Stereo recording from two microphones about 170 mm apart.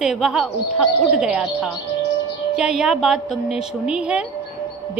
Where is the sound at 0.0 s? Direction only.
Centre (ahead or behind).